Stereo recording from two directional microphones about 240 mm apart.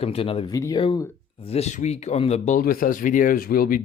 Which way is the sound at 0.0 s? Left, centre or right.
Left.